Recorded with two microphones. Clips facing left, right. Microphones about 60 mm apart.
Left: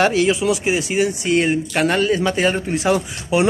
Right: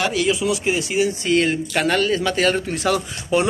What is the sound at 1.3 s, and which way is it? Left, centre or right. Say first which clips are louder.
Speech: left 3 dB; centre.